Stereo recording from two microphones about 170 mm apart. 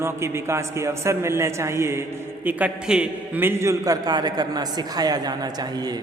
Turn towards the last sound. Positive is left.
turn(degrees=-25)  # may be behind; listen again after turning